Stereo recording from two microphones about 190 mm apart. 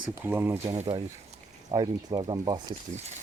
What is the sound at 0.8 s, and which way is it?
Speech, 30° right (ahead or behind).